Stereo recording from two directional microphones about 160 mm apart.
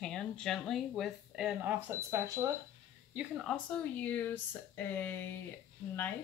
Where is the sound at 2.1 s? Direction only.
20° right (ahead or behind).